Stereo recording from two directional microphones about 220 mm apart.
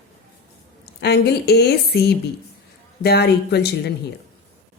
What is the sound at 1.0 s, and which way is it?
A woman's voice, 50° left (ahead or behind).